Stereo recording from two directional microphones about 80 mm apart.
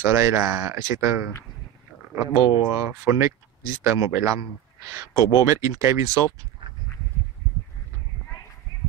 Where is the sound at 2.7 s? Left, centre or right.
Right.